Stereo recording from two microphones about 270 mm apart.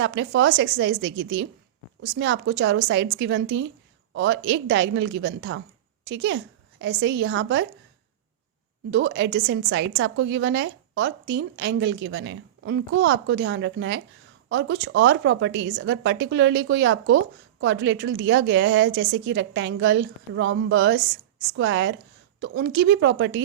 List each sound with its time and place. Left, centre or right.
0.0 s a woman's voice: right
8.9 s a woman's voice: right